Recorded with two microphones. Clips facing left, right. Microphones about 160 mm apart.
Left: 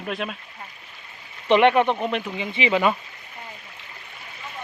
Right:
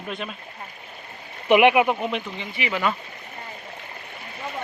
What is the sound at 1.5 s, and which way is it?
Speech, 10° right (ahead or behind).